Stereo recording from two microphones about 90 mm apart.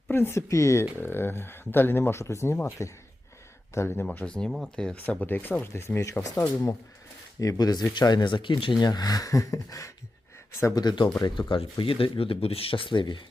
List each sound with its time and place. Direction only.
0.1 s speech: 25° left (ahead or behind)
4.0 s speech: 15° left (ahead or behind)
5.2 s speech: 20° left (ahead or behind)
7.3 s speech: 40° left (ahead or behind)
10.8 s speech: 55° left (ahead or behind)
11.3 s speech: 70° left (ahead or behind)